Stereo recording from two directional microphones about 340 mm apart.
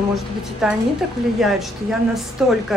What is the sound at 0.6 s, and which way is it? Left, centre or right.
A woman's voice, centre.